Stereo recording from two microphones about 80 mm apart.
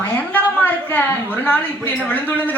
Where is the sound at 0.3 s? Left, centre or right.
Left.